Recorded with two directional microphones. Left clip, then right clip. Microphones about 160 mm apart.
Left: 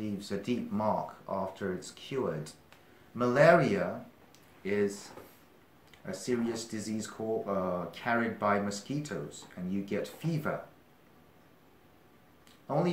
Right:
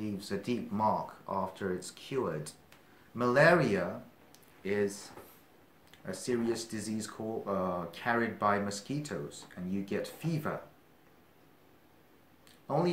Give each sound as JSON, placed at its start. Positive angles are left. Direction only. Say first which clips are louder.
{"t": 0.0, "sound": "speech", "louder": "even", "side_deg": -35}
{"t": 6.0, "sound": "speech", "louder": "even", "side_deg": -35}
{"t": 12.6, "sound": "speech", "louder": "even", "side_deg": -35}